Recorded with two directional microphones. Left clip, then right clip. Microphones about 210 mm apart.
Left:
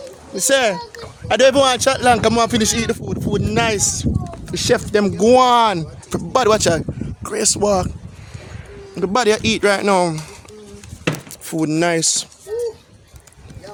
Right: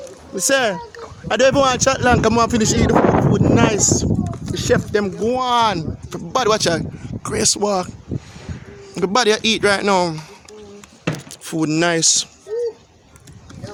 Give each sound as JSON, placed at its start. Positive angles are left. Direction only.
{"t": 0.3, "sound": "speech", "side_deg": 0}
{"t": 4.5, "sound": "speech", "side_deg": 25}
{"t": 5.0, "sound": "speech", "side_deg": 50}
{"t": 5.5, "sound": "speech", "side_deg": 15}
{"t": 9.1, "sound": "speech", "side_deg": 10}